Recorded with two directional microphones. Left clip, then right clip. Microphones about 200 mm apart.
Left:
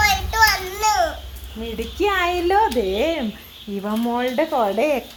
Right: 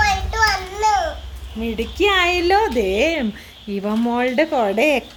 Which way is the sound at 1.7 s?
15° right (ahead or behind).